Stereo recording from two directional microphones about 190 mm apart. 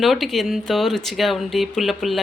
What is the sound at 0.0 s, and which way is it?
Speech, centre (ahead or behind).